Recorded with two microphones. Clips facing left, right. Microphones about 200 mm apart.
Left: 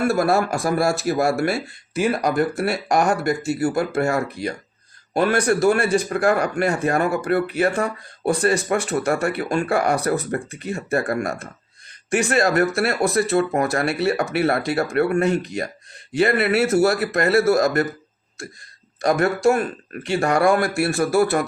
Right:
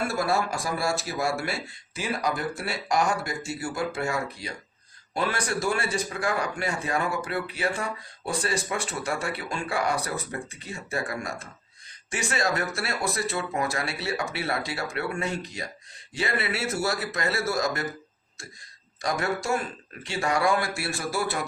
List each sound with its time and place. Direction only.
0.1 s a man's voice: 60° left (ahead or behind)
19.0 s a man's voice: 60° left (ahead or behind)